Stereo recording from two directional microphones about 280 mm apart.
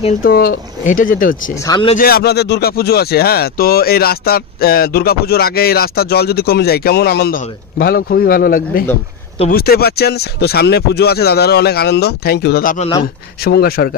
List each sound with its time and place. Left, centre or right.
0.0 s speech: left
1.7 s a man's voice: centre
2.0 s speech: left